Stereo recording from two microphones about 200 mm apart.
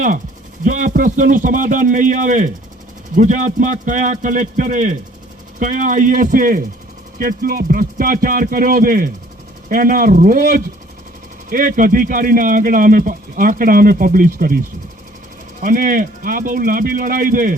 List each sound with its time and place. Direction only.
0.6 s a man's voice: 40° right (ahead or behind)
15.6 s speech: 45° right (ahead or behind)